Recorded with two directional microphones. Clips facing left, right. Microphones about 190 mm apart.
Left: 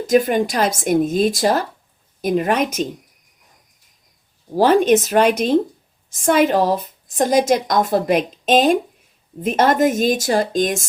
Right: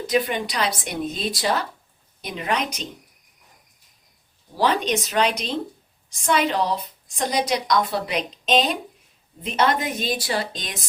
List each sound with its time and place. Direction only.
0.1 s a woman's voice: 45° left (ahead or behind)
4.5 s a woman's voice: 50° left (ahead or behind)